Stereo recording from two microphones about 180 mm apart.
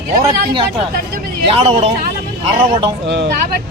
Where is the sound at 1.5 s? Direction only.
30° right (ahead or behind).